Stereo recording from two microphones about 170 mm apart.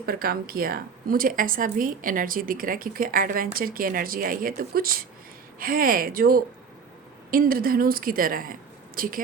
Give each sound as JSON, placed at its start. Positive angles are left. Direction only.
{"t": 0.0, "sound": "a woman's voice", "side_deg": -60}